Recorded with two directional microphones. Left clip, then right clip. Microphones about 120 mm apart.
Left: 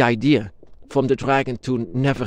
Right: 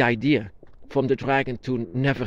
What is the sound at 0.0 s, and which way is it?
Speech, 50° left (ahead or behind).